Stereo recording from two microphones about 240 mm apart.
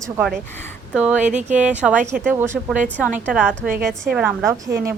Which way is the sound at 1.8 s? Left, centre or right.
Centre.